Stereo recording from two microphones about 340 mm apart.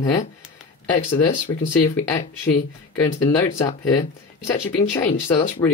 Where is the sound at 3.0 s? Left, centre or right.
Centre.